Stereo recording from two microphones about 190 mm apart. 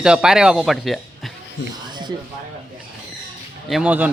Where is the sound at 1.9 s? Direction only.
25° right (ahead or behind).